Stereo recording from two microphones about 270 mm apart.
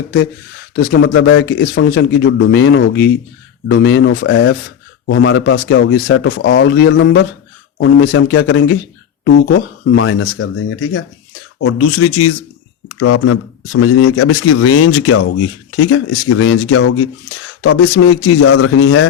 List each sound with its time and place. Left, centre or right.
0.8 s speech: left